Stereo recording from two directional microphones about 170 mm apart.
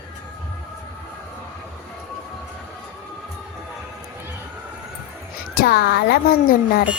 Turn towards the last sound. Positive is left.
turn(degrees=60)  # may be behind; listen again after turning